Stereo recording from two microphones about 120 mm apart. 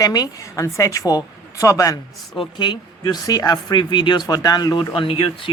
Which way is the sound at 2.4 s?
40° left (ahead or behind).